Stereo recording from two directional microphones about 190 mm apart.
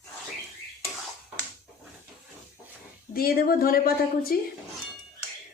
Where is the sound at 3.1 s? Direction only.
50° left (ahead or behind).